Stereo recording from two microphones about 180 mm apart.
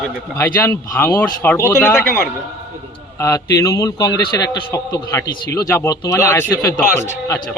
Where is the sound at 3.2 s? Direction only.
20° left (ahead or behind).